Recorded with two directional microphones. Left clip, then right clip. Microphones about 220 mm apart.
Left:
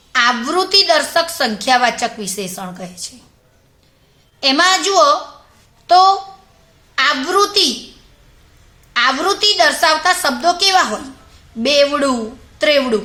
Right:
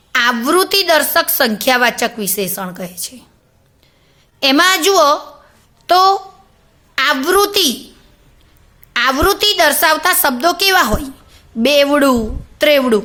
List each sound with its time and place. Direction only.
0.1 s a woman's voice: 45° right (ahead or behind)
4.4 s a woman's voice: 45° right (ahead or behind)
8.9 s a woman's voice: 45° right (ahead or behind)